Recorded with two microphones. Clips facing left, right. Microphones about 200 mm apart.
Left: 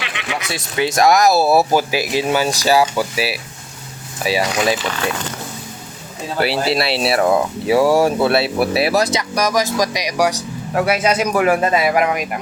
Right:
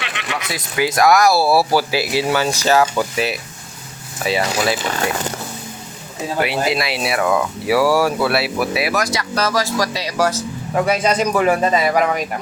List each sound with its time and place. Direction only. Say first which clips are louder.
0.0 s a sound: left 1 dB; centre (ahead or behind)
0.5 s speech: even; 25° left (ahead or behind)
6.4 s speech: left 2 dB; 35° left (ahead or behind); by 12.4 s 5° left (ahead or behind)